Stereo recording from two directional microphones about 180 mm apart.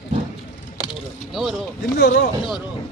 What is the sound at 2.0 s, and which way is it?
Speech, 60° left (ahead or behind).